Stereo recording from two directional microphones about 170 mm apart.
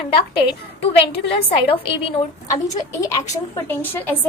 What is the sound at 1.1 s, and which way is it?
Speech, 75° left (ahead or behind).